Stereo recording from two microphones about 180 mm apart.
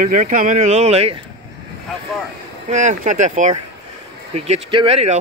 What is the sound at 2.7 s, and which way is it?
Speech, 40° right (ahead or behind).